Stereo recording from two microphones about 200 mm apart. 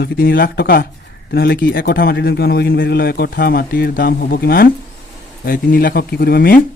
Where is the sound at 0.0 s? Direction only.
50° left (ahead or behind).